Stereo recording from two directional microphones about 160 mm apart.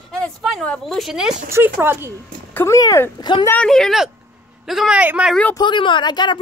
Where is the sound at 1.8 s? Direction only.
15° right (ahead or behind).